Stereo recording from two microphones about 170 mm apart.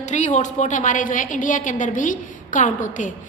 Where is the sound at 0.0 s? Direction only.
45° left (ahead or behind).